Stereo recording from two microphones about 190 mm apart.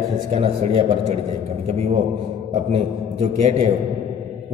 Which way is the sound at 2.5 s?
35° right (ahead or behind).